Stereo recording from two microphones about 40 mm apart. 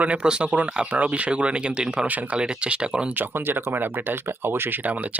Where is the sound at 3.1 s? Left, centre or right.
Right.